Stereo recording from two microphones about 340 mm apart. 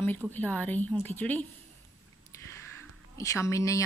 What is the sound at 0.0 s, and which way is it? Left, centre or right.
Speech, centre.